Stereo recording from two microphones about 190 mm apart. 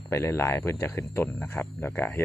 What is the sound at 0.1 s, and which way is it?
Speech, 15° left (ahead or behind).